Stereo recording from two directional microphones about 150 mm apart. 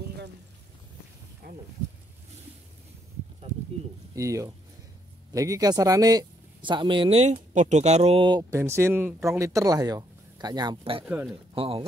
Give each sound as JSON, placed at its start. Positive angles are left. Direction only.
{"t": 4.1, "sound": "speech", "side_deg": -20}